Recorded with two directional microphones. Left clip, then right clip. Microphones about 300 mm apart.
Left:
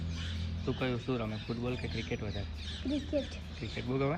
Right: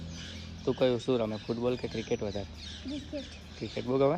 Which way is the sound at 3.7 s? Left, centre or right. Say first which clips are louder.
Right 7 dB; centre.